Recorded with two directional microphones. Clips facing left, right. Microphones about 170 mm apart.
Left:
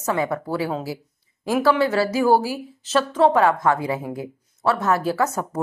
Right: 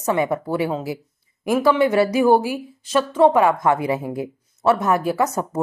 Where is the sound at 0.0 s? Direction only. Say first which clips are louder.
Right 3 dB; 20° right (ahead or behind).